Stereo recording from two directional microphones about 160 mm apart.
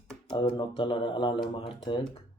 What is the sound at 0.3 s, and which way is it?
Speech, 30° left (ahead or behind).